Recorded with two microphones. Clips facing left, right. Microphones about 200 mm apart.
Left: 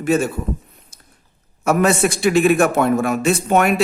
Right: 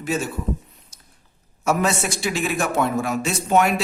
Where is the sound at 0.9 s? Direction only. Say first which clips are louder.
Left 3 dB; 55° left (ahead or behind).